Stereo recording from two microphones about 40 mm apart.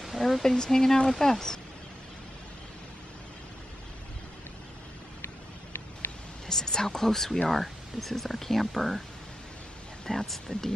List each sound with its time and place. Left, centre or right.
0.2 s speech: centre
5.2 s vehicle: left
6.4 s speech: centre
10.0 s speech: centre